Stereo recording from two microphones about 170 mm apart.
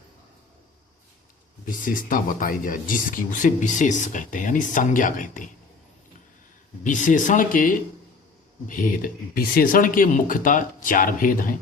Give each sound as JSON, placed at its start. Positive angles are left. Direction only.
{"t": 1.6, "sound": "speech", "side_deg": 55}
{"t": 6.8, "sound": "speech", "side_deg": 50}